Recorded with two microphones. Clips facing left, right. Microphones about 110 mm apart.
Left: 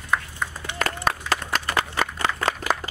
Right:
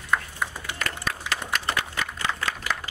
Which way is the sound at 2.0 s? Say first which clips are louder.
Left 4 dB; 40° left (ahead or behind).